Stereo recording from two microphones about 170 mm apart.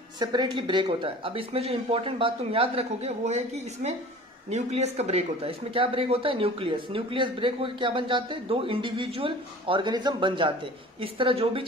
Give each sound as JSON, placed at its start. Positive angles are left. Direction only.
{"t": 0.2, "sound": "speech", "side_deg": -25}